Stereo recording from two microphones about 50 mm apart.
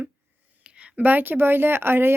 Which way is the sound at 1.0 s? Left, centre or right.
Right.